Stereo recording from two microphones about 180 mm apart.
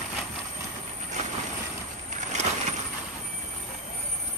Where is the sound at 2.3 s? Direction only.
40° right (ahead or behind).